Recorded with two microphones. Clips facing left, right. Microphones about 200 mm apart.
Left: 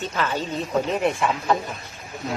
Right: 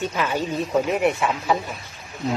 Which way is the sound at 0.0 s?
10° right (ahead or behind).